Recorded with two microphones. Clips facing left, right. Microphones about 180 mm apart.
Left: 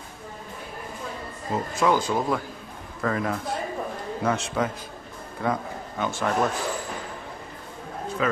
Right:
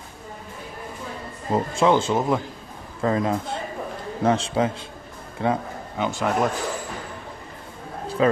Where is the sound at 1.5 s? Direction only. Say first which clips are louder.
Right 4 dB; 25° right (ahead or behind).